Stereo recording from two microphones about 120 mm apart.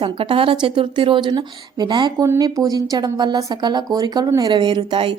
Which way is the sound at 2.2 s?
25° right (ahead or behind).